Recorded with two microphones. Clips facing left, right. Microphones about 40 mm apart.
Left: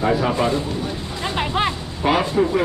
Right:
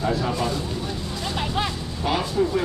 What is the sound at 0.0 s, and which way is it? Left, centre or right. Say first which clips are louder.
Speech: left 5 dB; left.